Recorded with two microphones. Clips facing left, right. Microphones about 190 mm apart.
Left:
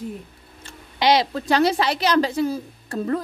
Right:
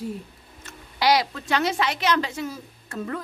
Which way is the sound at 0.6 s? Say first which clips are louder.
Left 2 dB; 25° left (ahead or behind).